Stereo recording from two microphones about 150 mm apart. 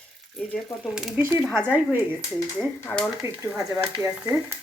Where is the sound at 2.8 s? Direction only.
5° left (ahead or behind).